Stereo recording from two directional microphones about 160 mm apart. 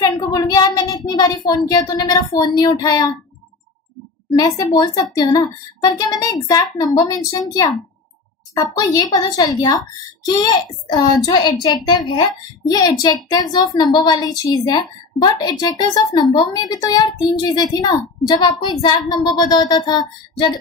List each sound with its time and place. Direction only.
0.0 s a child's voice: 25° left (ahead or behind)
4.4 s a child's voice: 25° left (ahead or behind)